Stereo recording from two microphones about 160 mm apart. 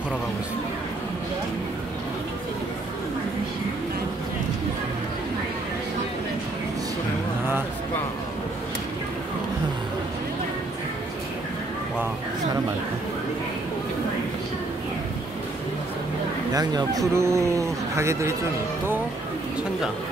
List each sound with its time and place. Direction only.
16.5 s speech: 25° right (ahead or behind)